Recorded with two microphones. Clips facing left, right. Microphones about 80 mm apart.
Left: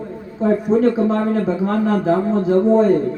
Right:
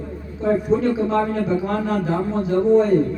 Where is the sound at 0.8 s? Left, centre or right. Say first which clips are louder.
Left 3 dB; left.